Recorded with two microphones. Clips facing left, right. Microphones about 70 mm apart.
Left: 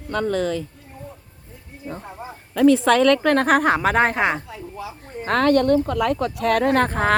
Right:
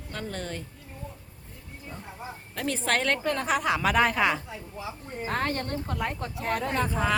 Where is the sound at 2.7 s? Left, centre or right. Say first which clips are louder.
Left 11 dB; left.